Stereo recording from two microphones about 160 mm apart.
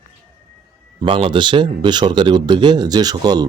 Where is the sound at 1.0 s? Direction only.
30° right (ahead or behind).